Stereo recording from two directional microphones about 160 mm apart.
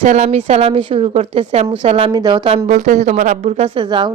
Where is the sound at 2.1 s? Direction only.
25° right (ahead or behind).